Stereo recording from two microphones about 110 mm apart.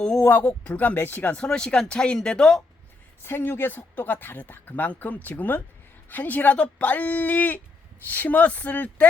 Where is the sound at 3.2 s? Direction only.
20° left (ahead or behind).